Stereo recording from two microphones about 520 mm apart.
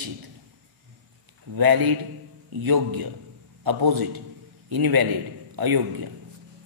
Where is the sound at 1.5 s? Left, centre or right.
Right.